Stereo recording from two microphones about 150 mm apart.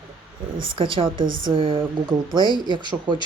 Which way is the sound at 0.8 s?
35° right (ahead or behind).